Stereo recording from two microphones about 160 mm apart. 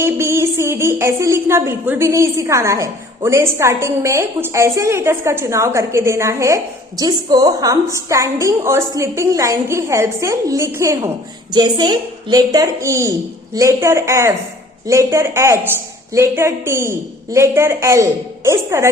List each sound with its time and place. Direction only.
0.0 s a woman's voice: 15° right (ahead or behind)